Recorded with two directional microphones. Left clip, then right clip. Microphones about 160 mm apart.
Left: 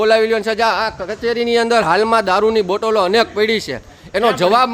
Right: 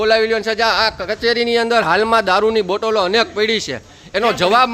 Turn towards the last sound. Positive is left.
turn(degrees=10)  # may be behind; listen again after turning